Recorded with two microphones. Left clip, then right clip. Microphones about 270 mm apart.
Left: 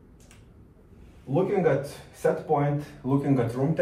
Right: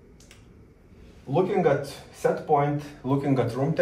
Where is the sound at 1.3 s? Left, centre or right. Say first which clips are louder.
Right 1 dB; centre.